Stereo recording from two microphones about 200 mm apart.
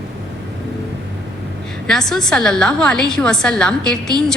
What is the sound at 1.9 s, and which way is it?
A woman's voice, centre (ahead or behind).